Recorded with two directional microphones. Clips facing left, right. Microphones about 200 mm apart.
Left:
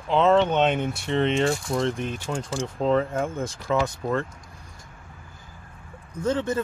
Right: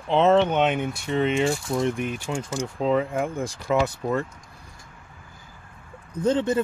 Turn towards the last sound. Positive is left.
turn(degrees=-15)  # may be behind; listen again after turning